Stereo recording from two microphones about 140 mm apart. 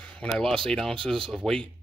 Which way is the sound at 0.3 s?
Centre (ahead or behind).